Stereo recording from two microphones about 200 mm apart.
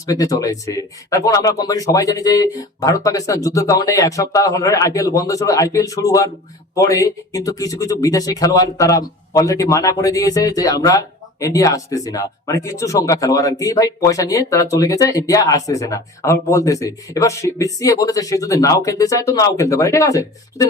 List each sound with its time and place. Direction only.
0.0 s speech: 15° left (ahead or behind)